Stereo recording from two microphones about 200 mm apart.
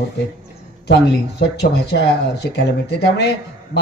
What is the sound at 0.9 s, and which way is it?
A woman's voice, 55° left (ahead or behind).